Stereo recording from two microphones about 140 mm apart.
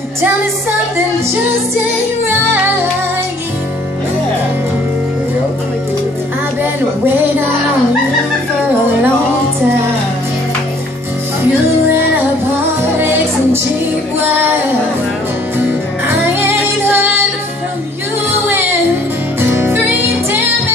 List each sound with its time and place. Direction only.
16.3 s music: 15° right (ahead or behind)
19.4 s music: 15° right (ahead or behind)